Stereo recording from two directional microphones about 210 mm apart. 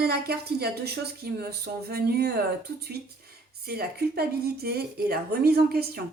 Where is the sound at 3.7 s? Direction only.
45° right (ahead or behind).